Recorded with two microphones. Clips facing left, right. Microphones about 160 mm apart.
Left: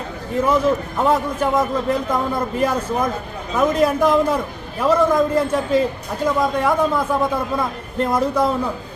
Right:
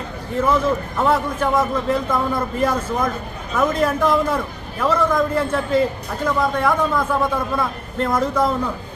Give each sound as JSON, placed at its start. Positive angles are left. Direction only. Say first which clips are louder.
{"t": 0.3, "sound": "a man's voice", "louder": "left 1 dB", "side_deg": 15}